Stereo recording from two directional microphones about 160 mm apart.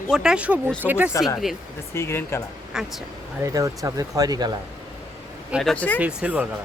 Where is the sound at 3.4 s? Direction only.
20° right (ahead or behind).